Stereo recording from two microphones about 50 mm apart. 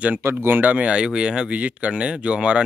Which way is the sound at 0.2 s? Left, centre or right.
Right.